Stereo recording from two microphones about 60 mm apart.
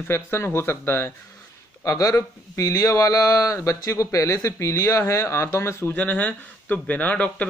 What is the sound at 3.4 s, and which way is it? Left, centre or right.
Speech, left.